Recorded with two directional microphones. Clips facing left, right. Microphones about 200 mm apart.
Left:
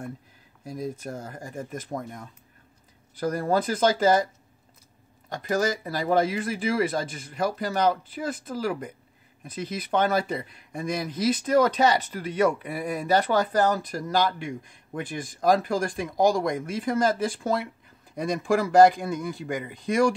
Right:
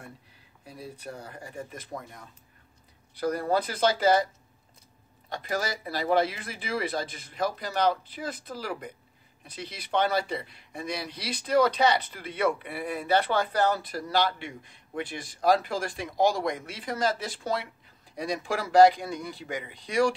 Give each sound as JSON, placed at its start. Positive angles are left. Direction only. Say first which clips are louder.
{"t": 0.7, "sound": "speech", "louder": "left 8 dB", "side_deg": 45}
{"t": 5.3, "sound": "speech", "louder": "left 6 dB", "side_deg": 45}